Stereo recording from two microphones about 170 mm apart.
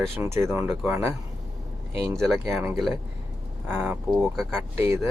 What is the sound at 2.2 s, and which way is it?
Speech, centre (ahead or behind).